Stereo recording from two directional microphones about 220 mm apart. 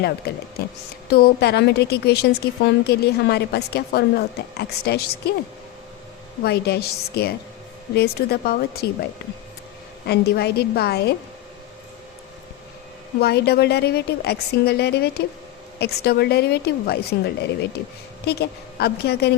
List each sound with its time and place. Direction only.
0.3 s a woman's voice: 45° left (ahead or behind)
6.4 s a woman's voice: 45° left (ahead or behind)
10.1 s a woman's voice: 45° left (ahead or behind)
13.1 s a woman's voice: 45° left (ahead or behind)